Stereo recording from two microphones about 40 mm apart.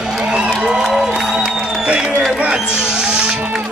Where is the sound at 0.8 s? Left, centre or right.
Centre.